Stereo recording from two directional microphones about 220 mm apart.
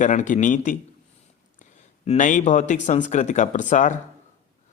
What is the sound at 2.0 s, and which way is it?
Speech, 35° left (ahead or behind).